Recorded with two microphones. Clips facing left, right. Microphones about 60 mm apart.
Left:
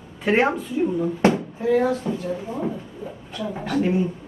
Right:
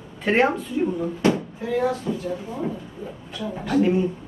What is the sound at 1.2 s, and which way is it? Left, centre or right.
Speech, left.